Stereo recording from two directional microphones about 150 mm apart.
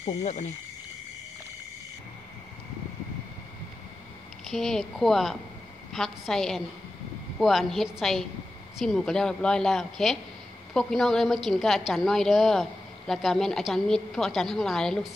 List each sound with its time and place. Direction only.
0.0 s speech: 50° left (ahead or behind)
4.5 s a woman's voice: centre (ahead or behind)